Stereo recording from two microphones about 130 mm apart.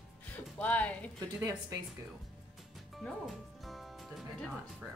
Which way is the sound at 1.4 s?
25° right (ahead or behind).